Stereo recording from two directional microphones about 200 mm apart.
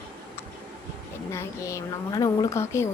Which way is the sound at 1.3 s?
15° left (ahead or behind).